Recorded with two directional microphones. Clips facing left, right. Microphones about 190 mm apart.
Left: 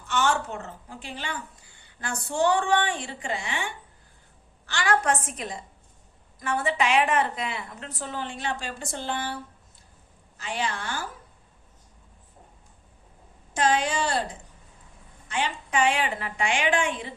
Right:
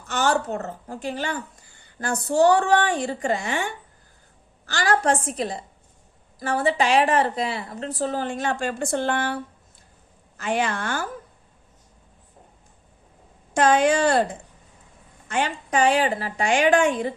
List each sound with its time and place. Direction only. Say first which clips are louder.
0.0 s a woman's voice: right 3 dB; 40° right (ahead or behind)
13.5 s a woman's voice: right 6 dB; 50° right (ahead or behind)
15.3 s a woman's voice: right 4 dB; 45° right (ahead or behind)